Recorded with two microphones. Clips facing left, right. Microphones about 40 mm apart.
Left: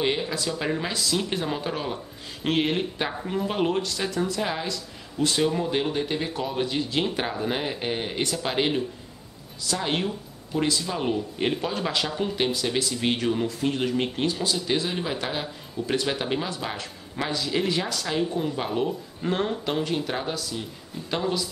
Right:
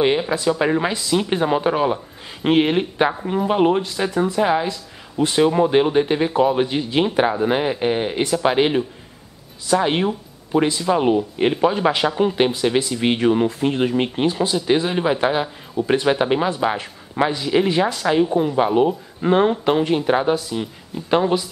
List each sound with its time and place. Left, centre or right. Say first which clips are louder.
0.0 s speech: right 8 dB; right